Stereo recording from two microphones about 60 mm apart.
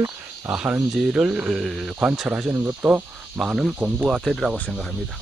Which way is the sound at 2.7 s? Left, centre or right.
Right.